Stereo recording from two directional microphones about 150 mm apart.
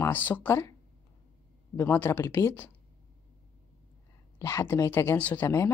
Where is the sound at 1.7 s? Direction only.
15° left (ahead or behind).